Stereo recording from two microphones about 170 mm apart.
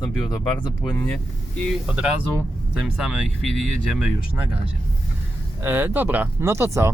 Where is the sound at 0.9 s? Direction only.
10° left (ahead or behind).